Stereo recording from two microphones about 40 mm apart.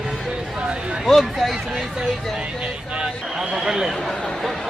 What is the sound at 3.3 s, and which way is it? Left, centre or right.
Speech, centre.